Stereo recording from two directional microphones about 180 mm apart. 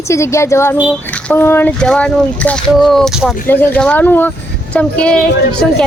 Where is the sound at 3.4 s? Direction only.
10° left (ahead or behind).